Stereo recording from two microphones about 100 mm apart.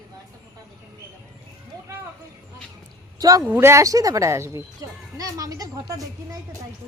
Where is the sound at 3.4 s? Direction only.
25° right (ahead or behind).